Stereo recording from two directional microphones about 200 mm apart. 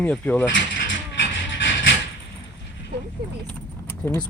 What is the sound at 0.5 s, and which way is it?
Mechanisms, 65° left (ahead or behind).